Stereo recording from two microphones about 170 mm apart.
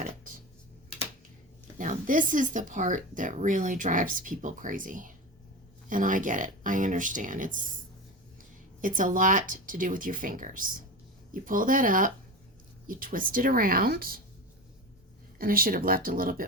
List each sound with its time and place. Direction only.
1.8 s a woman's voice: 50° right (ahead or behind)
15.4 s a woman's voice: 60° right (ahead or behind)